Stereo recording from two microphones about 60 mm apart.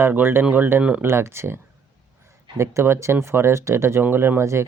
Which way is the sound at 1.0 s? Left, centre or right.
Right.